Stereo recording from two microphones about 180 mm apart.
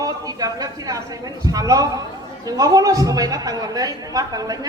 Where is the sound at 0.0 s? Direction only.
20° right (ahead or behind).